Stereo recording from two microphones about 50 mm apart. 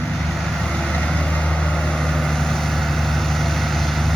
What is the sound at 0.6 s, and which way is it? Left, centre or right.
Vehicle, centre.